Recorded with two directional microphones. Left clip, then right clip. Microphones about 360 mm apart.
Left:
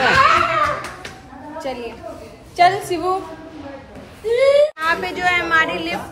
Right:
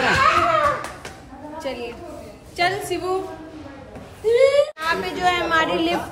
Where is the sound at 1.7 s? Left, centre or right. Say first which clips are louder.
Left 2 dB; centre.